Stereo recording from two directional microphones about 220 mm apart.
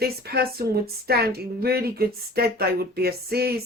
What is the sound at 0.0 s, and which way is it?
A woman's voice, 45° right (ahead or behind).